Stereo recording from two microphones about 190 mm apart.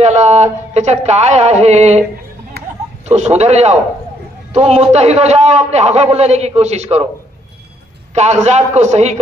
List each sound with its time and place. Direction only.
0.0 s speech: 35° right (ahead or behind)
2.6 s a sound: 55° right (ahead or behind)
3.2 s speech: 35° right (ahead or behind)
8.1 s speech: 35° right (ahead or behind)